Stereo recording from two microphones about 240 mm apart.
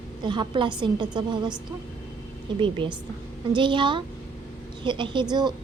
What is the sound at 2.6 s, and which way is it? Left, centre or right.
A woman's voice, right.